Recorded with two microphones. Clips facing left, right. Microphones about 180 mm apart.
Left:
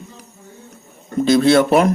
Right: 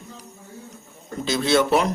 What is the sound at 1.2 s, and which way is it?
Speech, 55° left (ahead or behind).